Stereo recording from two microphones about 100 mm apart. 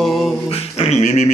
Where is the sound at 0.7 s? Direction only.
90° left.